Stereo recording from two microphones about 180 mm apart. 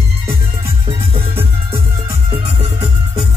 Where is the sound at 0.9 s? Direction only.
30° right (ahead or behind).